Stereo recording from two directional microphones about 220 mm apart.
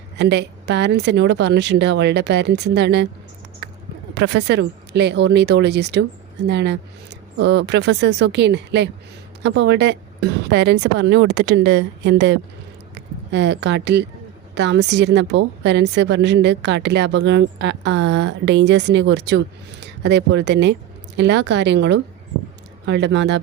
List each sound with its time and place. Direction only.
0.2 s a woman's voice: 50° right (ahead or behind)
3.6 s a sound: 50° right (ahead or behind)
4.1 s a woman's voice: 50° right (ahead or behind)